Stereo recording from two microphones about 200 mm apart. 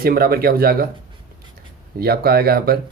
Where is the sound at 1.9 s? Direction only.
50° right (ahead or behind).